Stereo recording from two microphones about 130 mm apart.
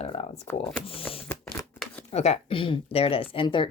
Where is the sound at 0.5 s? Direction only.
20° left (ahead or behind).